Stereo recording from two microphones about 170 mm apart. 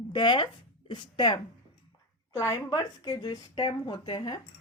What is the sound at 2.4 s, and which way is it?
Speech, 20° left (ahead or behind).